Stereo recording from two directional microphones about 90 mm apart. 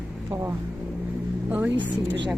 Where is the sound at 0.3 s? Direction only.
30° right (ahead or behind).